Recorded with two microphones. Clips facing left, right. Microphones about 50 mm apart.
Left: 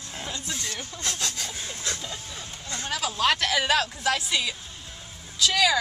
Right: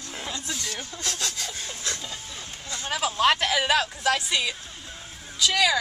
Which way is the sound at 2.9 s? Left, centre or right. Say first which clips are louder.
Right 3 dB; right.